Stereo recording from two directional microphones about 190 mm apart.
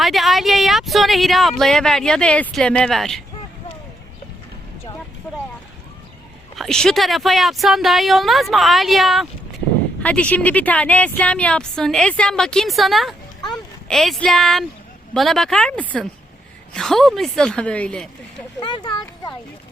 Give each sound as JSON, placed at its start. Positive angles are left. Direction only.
{"t": 0.0, "sound": "speech", "side_deg": 0}
{"t": 6.6, "sound": "speech", "side_deg": 5}
{"t": 18.6, "sound": "speech", "side_deg": 25}